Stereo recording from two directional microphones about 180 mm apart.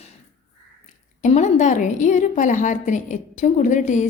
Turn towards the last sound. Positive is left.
turn(degrees=45)  # may be behind; listen again after turning